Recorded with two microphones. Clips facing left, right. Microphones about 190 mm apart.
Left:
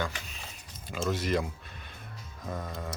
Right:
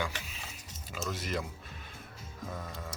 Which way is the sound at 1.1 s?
Centre (ahead or behind).